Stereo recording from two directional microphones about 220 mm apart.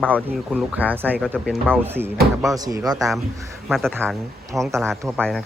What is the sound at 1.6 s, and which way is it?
Speech, 10° right (ahead or behind).